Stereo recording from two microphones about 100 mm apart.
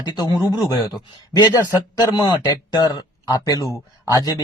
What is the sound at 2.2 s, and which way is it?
Speech, 50° left (ahead or behind).